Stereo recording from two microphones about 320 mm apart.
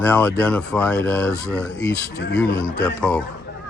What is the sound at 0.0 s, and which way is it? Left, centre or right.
Speech, centre.